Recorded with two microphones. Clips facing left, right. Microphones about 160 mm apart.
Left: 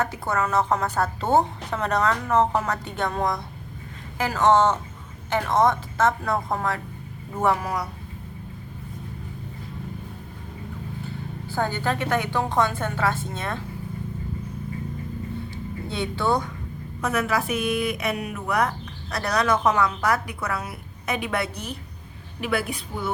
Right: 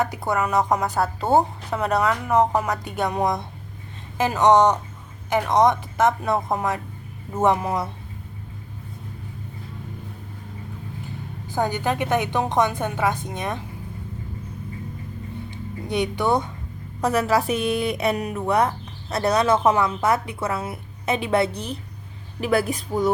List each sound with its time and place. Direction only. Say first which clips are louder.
0.0 s a woman's voice: right 2 dB; 15° right (ahead or behind)
11.4 s a woman's voice: right 2 dB; 15° right (ahead or behind)
15.9 s a woman's voice: right 3 dB; 15° right (ahead or behind)
17.0 s a woman's voice: right 4 dB; 35° right (ahead or behind)